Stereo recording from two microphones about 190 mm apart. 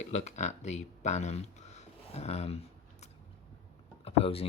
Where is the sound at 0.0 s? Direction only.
40° left (ahead or behind).